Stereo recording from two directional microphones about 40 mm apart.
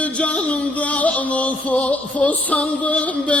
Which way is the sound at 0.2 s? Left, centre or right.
Left.